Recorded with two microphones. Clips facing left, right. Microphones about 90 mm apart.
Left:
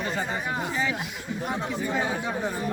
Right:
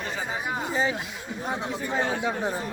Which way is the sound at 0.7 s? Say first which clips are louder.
Right 4 dB; 35° right (ahead or behind).